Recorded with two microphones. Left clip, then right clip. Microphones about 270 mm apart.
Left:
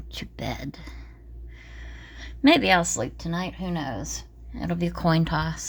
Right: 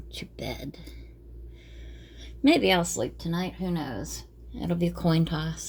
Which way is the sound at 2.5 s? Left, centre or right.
Left.